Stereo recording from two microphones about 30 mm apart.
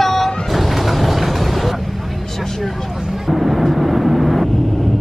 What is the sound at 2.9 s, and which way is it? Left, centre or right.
Vehicle, centre.